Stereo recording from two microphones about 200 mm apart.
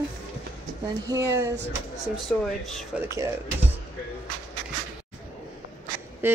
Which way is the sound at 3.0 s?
15° right (ahead or behind).